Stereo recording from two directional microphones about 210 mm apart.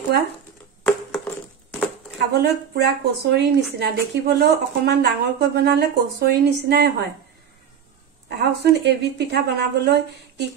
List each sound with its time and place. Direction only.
1.1 s a sound: 5° left (ahead or behind)
2.1 s speech: 50° right (ahead or behind)
8.3 s speech: 55° right (ahead or behind)